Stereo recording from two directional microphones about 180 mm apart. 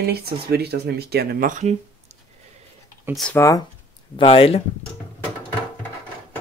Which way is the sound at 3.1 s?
5° left (ahead or behind).